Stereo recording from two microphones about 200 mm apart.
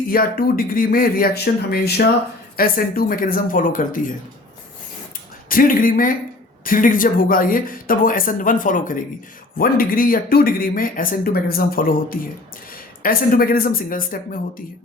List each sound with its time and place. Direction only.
0.1 s speech: 45° left (ahead or behind)
5.5 s speech: 45° left (ahead or behind)